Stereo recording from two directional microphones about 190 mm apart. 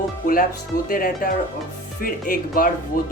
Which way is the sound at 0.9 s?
45° left (ahead or behind).